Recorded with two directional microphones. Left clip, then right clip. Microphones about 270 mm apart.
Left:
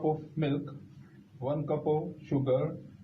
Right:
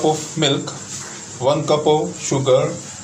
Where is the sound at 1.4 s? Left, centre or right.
Right.